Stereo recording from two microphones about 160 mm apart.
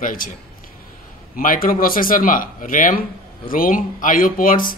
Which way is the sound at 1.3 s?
60° left (ahead or behind).